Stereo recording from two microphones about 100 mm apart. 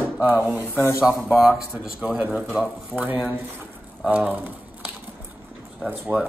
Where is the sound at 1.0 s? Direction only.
5° right (ahead or behind).